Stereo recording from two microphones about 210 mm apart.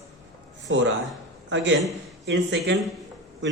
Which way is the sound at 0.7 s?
65° right (ahead or behind).